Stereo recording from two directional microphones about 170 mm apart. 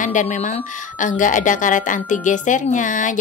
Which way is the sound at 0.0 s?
45° left (ahead or behind).